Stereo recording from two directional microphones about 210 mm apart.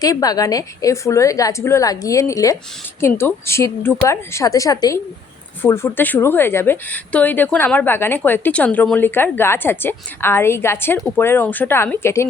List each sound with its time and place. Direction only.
0.0 s speech: 15° left (ahead or behind)